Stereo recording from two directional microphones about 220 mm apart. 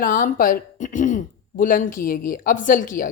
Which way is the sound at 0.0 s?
40° left (ahead or behind).